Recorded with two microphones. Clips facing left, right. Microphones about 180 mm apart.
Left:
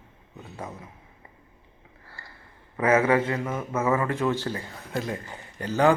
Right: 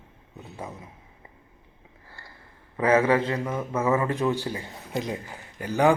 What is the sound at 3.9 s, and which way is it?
A man's voice, 20° right (ahead or behind).